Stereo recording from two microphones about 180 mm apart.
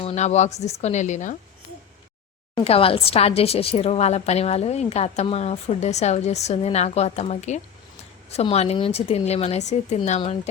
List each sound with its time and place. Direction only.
0.0 s a woman's voice: 35° left (ahead or behind)
2.6 s a woman's voice: 30° left (ahead or behind)